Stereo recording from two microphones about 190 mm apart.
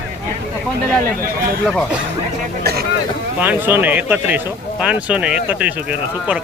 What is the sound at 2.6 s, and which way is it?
Speech, 55° right (ahead or behind).